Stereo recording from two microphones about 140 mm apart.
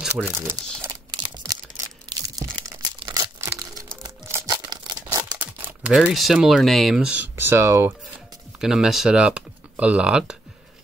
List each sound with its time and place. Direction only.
0.1 s speech: 15° right (ahead or behind)
1.1 s tearing: 30° right (ahead or behind)
3.3 s a sound: 15° right (ahead or behind)
4.0 s crumpling: 25° right (ahead or behind)
5.4 s speech: 15° right (ahead or behind)
8.5 s speech: 5° right (ahead or behind)